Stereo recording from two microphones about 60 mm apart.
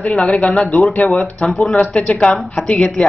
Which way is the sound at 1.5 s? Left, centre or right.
Centre.